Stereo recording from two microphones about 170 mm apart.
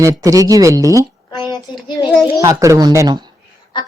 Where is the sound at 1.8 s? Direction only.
25° left (ahead or behind).